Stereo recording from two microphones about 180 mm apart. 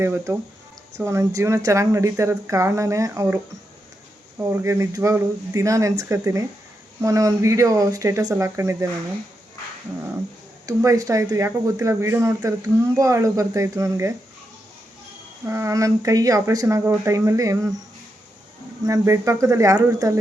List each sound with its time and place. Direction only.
0.0 s speech: 15° right (ahead or behind)
4.4 s speech: 15° right (ahead or behind)
10.7 s speech: 20° right (ahead or behind)
15.4 s speech: 15° right (ahead or behind)
18.9 s speech: 15° right (ahead or behind)